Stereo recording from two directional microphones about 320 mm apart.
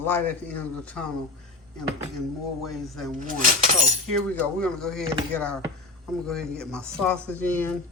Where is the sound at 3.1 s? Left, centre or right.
Right.